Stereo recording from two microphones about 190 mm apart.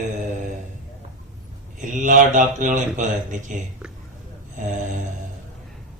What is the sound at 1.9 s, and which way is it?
Speech, 45° right (ahead or behind).